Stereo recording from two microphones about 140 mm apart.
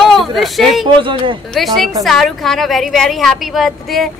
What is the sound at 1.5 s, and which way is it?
A woman's voice, centre (ahead or behind).